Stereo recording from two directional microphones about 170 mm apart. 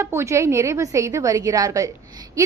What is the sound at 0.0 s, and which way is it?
A woman's voice, 15° right (ahead or behind).